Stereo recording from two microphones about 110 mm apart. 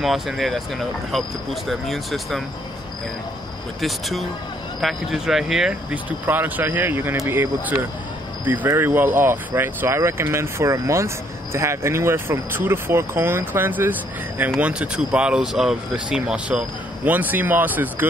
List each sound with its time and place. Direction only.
0.0 s speech: centre (ahead or behind)
3.8 s speech: centre (ahead or behind); by 18.0 s 15° right (ahead or behind)